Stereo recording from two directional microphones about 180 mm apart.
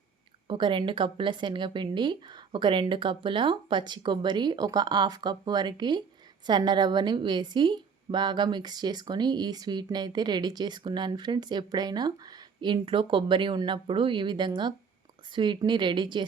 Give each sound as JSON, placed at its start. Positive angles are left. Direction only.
{"t": 0.4, "sound": "a woman's voice", "side_deg": -25}